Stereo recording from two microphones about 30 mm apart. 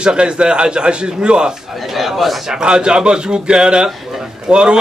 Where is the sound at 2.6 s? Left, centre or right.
Right.